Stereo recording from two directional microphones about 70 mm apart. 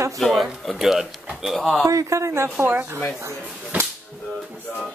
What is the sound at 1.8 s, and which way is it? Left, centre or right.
Speech, right.